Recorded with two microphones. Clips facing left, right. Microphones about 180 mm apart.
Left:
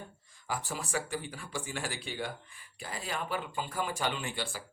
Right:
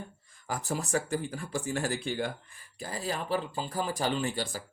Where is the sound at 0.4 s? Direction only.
45° right (ahead or behind).